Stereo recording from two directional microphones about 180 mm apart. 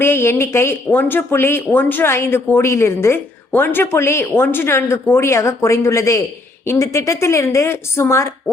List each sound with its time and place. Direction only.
0.0 s a woman's voice: 15° left (ahead or behind)